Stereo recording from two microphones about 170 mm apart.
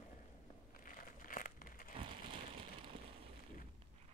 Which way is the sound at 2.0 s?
30° right (ahead or behind).